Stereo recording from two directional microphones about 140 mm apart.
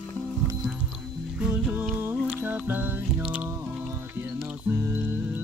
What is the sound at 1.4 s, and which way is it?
Music, 10° right (ahead or behind).